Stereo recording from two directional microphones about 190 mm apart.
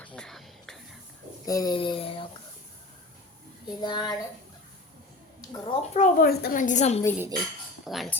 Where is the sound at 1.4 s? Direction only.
20° left (ahead or behind).